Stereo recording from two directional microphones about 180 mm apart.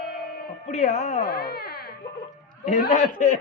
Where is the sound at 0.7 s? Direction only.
45° left (ahead or behind).